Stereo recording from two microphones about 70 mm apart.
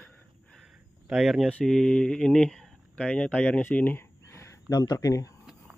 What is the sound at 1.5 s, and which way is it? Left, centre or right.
Speech, centre.